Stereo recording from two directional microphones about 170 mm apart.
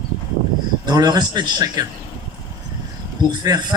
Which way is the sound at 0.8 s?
25° right (ahead or behind).